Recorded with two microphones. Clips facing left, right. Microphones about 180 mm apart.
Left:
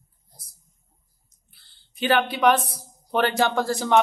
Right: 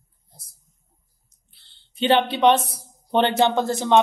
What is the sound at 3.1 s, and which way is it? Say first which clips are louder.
Speech: right 3 dB; 25° right (ahead or behind).